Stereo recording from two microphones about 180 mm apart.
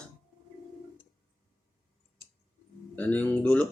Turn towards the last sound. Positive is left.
turn(degrees=5)  # may be behind; listen again after turning